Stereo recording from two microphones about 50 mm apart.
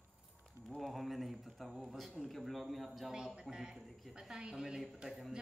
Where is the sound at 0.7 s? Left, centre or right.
Centre.